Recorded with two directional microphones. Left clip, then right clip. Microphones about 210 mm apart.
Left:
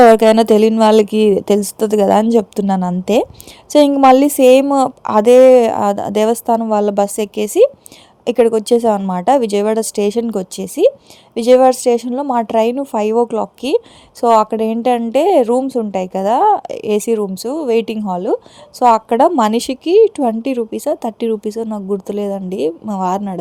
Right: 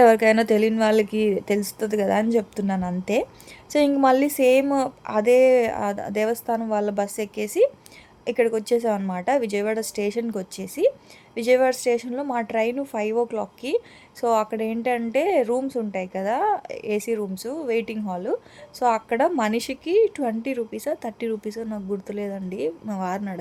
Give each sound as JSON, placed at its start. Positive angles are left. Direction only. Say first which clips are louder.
{"t": 0.0, "sound": "speech", "louder": "left 8 dB", "side_deg": 30}